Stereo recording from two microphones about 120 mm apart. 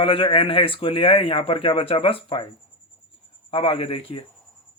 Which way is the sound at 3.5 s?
50° left (ahead or behind).